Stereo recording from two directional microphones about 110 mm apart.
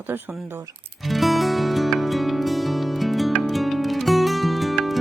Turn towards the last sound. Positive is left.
turn(degrees=0)  # may be behind; listen again after turning